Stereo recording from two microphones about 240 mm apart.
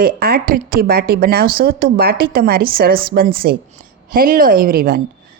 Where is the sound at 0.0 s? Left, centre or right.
Right.